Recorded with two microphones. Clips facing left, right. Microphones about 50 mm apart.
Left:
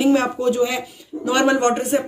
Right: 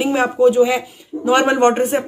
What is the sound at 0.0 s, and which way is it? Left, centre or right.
Speech, centre.